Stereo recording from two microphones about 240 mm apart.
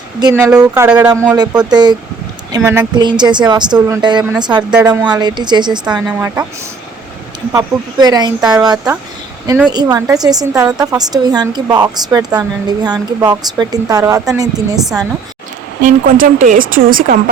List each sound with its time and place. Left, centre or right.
0.2 s a woman's voice: centre
7.5 s a woman's voice: centre
9.5 s a woman's voice: centre
15.8 s a woman's voice: right